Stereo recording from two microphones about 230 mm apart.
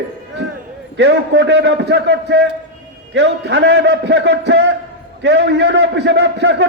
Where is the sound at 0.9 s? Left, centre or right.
Right.